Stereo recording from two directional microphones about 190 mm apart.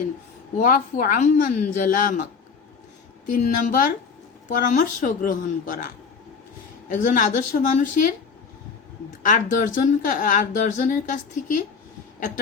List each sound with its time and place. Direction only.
0.6 s speech: 45° left (ahead or behind)
3.2 s speech: 45° left (ahead or behind)
6.8 s speech: 45° left (ahead or behind)
9.2 s speech: 45° left (ahead or behind)